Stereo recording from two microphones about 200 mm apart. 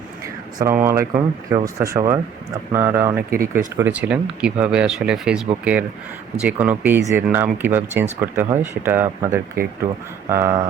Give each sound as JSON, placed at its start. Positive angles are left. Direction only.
{"t": 0.6, "sound": "speech", "side_deg": -15}
{"t": 3.2, "sound": "speech", "side_deg": -45}
{"t": 3.8, "sound": "speech", "side_deg": -10}